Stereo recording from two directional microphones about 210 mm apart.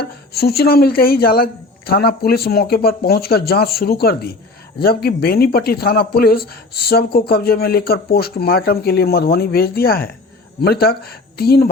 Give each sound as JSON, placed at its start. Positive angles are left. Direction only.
{"t": 0.0, "sound": "speech", "side_deg": 50}